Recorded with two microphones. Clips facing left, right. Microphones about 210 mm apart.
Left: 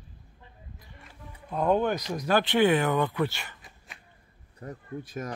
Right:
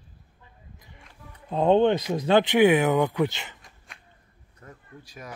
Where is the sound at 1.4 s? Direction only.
25° right (ahead or behind).